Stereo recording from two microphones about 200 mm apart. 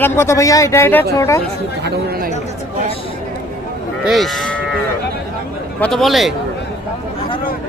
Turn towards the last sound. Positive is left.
turn(degrees=0)  # may be behind; listen again after turning